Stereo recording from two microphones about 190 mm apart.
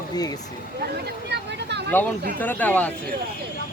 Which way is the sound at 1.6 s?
65° right (ahead or behind).